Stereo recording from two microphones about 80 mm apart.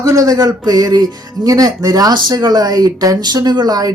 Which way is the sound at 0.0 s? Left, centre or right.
Right.